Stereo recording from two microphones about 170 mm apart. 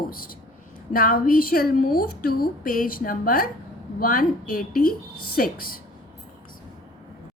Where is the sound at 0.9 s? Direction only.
60° left (ahead or behind).